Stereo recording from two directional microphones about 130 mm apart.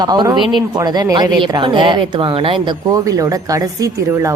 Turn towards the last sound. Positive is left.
turn(degrees=-25)  # may be behind; listen again after turning